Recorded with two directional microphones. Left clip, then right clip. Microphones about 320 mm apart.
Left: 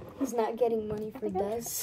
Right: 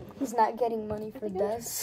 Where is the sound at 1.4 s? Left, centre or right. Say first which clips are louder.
Right 3 dB; centre.